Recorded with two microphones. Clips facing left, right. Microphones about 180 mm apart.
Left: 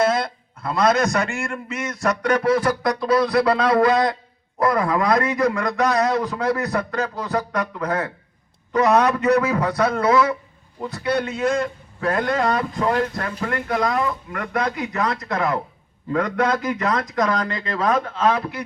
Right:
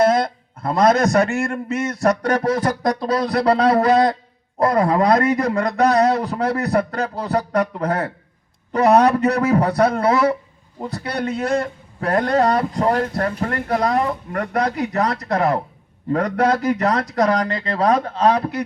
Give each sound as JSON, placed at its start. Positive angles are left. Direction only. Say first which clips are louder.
{"t": 0.6, "sound": "a man's voice", "louder": "right 3 dB", "side_deg": -35}